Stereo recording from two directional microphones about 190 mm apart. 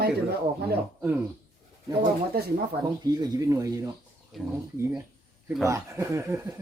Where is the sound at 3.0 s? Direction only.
20° right (ahead or behind).